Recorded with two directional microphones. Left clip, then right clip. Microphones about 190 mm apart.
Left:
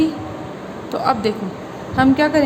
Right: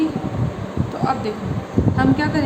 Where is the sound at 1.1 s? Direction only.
50° left (ahead or behind).